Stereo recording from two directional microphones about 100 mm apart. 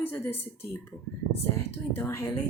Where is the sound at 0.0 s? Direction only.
25° left (ahead or behind).